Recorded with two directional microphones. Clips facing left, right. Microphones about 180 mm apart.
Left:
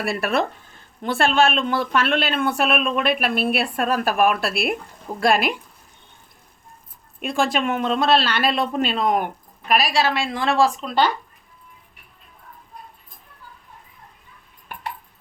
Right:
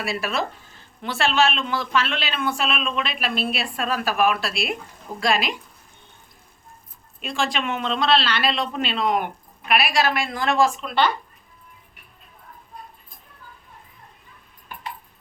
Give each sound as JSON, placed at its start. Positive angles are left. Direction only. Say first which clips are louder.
{"t": 0.0, "sound": "speech", "louder": "left 4 dB", "side_deg": 55}
{"t": 7.2, "sound": "speech", "louder": "left 4 dB", "side_deg": 50}